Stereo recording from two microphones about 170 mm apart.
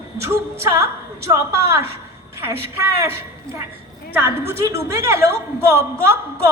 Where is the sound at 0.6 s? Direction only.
15° right (ahead or behind).